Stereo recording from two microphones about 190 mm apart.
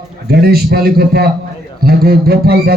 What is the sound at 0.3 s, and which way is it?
A man's voice, 55° right (ahead or behind).